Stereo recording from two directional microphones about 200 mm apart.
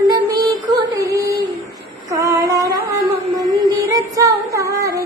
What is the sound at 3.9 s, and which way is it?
Music, 15° right (ahead or behind).